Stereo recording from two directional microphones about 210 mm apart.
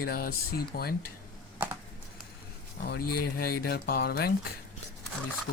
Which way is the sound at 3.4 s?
50° left (ahead or behind).